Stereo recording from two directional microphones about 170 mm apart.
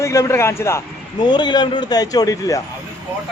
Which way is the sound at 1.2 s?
25° left (ahead or behind).